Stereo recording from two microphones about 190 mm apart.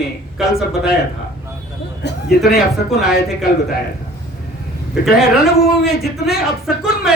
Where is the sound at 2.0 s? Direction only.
60° left (ahead or behind).